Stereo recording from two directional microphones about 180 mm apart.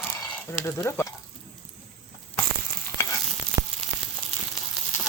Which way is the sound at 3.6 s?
15° right (ahead or behind).